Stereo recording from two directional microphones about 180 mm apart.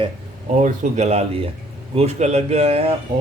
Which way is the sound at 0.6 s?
40° right (ahead or behind).